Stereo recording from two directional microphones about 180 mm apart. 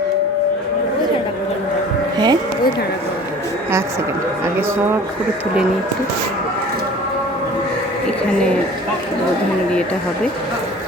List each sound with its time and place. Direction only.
2.1 s speech: 25° right (ahead or behind)